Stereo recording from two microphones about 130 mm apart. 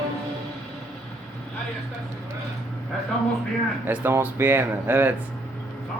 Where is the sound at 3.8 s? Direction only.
15° right (ahead or behind).